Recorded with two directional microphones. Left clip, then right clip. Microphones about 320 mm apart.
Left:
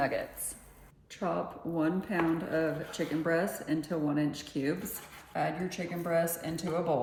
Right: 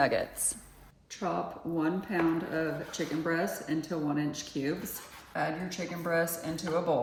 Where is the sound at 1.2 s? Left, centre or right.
Centre.